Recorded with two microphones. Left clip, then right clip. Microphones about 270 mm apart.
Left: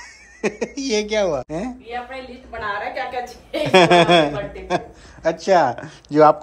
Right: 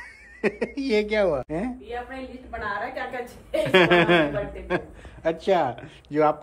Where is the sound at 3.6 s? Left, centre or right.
Centre.